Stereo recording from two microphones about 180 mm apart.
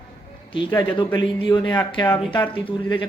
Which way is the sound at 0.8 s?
25° left (ahead or behind).